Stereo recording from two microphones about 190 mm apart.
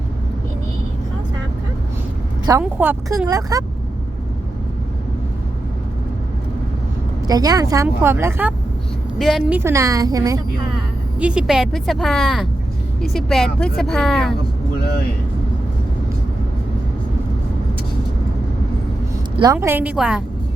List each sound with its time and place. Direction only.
2.5 s speech: 10° right (ahead or behind)
7.3 s speech: 20° right (ahead or behind); by 9.6 s centre (ahead or behind)
9.6 s speech: 15° right (ahead or behind)
11.2 s speech: 5° right (ahead or behind)
19.4 s speech: 15° right (ahead or behind)